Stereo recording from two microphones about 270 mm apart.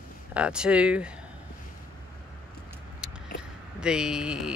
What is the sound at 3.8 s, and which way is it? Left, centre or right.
Speech, centre.